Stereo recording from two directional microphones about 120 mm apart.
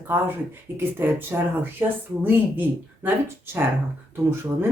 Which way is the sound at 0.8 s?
15° right (ahead or behind).